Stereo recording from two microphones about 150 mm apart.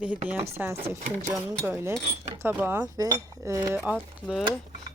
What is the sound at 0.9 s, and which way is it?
Speech, 55° right (ahead or behind).